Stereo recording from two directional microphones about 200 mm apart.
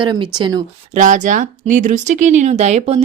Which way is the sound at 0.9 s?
40° right (ahead or behind).